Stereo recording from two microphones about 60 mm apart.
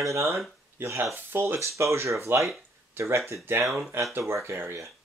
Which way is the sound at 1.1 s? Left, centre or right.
Right.